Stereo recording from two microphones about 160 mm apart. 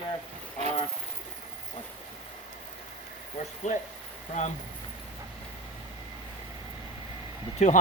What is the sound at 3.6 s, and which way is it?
Speech, 45° left (ahead or behind).